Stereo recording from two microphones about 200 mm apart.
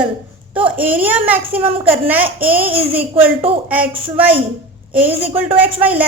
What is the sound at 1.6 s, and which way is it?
Speech, 25° right (ahead or behind).